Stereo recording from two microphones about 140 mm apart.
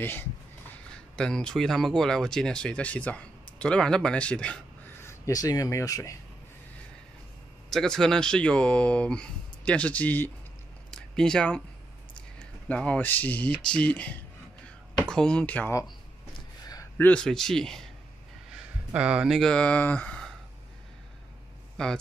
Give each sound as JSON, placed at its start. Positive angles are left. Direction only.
{"t": 0.0, "sound": "speech", "side_deg": 15}
{"t": 5.0, "sound": "speech", "side_deg": 25}
{"t": 7.7, "sound": "speech", "side_deg": 5}
{"t": 10.9, "sound": "a sound", "side_deg": 5}
{"t": 12.6, "sound": "speech", "side_deg": 10}
{"t": 16.9, "sound": "speech", "side_deg": 10}
{"t": 18.9, "sound": "speech", "side_deg": -10}
{"t": 21.8, "sound": "speech", "side_deg": 5}